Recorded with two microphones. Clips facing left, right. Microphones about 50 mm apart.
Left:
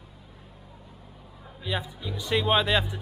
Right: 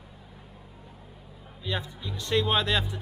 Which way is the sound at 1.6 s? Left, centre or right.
Centre.